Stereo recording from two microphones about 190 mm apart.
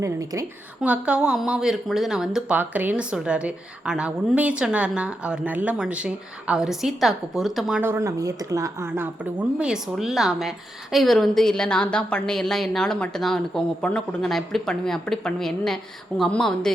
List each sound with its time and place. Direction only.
0.0 s a woman's voice: 15° right (ahead or behind)
0.8 s speech: 5° right (ahead or behind)